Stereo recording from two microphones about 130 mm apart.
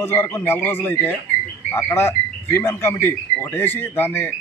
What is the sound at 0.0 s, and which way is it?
Speech, 20° left (ahead or behind).